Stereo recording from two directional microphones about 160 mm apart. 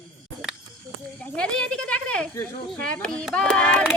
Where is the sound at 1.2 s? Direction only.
5° left (ahead or behind).